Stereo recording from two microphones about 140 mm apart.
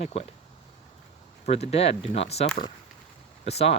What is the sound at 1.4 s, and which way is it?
Speech, 50° left (ahead or behind).